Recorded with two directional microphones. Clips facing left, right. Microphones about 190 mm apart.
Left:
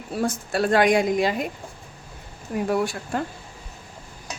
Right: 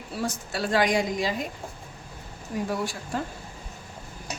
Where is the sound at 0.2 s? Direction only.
55° left (ahead or behind).